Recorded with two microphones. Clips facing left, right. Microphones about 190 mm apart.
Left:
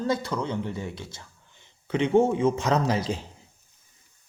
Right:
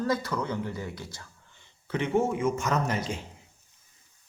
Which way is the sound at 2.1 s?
30° left (ahead or behind).